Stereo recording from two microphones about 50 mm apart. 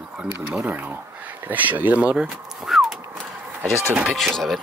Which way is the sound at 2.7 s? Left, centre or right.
Centre.